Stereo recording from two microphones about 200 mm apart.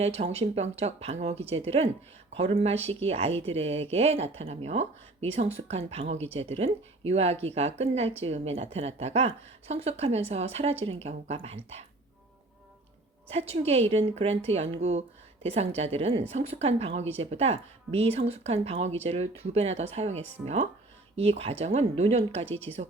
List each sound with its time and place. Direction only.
0.0 s a woman's voice: 30° right (ahead or behind)
13.5 s a woman's voice: 30° right (ahead or behind)